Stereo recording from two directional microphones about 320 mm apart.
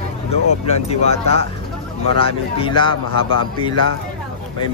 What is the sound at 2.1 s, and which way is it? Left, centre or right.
Speech, centre.